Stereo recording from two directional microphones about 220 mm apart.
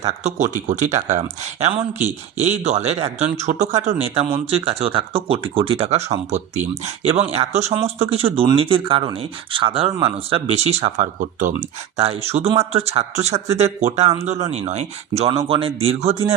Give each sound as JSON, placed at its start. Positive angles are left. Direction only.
{"t": 0.0, "sound": "speech", "side_deg": -30}